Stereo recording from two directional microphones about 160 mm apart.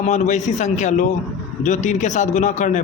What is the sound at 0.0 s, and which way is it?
A man's voice, 45° left (ahead or behind).